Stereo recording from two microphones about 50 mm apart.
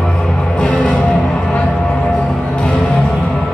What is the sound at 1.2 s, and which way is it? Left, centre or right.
Music, centre.